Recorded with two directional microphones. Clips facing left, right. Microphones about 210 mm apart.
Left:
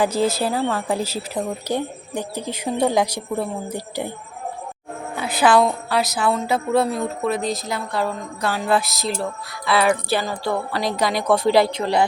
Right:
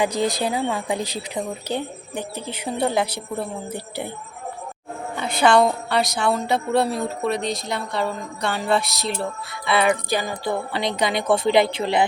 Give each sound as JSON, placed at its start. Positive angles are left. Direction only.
{"t": 0.0, "sound": "a woman's voice", "side_deg": 0}
{"t": 5.1, "sound": "a woman's voice", "side_deg": 5}
{"t": 10.1, "sound": "music", "side_deg": -15}
{"t": 10.8, "sound": "a woman's voice", "side_deg": 0}
{"t": 11.5, "sound": "music", "side_deg": -25}